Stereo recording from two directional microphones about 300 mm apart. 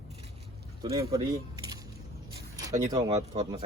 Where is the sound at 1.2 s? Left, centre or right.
Centre.